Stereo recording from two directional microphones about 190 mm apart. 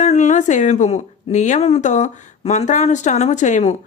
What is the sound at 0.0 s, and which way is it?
Speech, 40° left (ahead or behind).